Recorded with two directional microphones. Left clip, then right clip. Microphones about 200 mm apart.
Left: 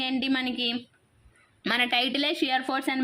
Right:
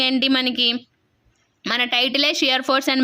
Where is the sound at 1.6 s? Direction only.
15° right (ahead or behind); by 2.9 s 35° right (ahead or behind).